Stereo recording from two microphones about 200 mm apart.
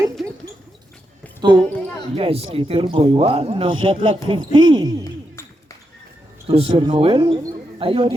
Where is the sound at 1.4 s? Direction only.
20° right (ahead or behind).